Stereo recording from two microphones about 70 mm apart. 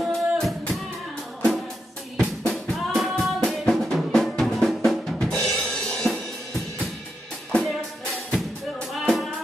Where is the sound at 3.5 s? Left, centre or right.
Centre.